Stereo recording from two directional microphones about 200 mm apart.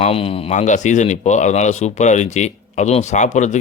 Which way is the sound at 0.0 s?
30° left (ahead or behind).